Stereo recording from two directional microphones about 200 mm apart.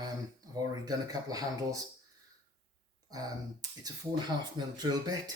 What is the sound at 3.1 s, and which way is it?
Speech, 20° right (ahead or behind).